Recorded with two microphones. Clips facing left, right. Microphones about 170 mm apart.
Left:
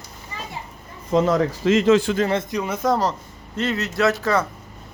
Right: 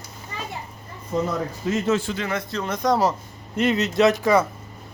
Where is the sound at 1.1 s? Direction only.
90° left.